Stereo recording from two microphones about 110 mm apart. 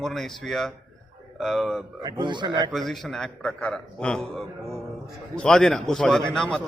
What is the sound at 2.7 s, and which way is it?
A man's voice, centre (ahead or behind).